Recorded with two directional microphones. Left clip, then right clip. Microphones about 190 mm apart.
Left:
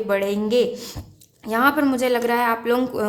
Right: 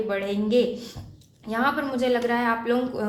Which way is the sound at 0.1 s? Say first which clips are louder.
Left 6 dB; 40° left (ahead or behind).